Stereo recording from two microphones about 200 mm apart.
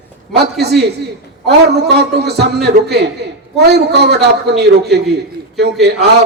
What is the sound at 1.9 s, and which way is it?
A man's voice, 55° right (ahead or behind).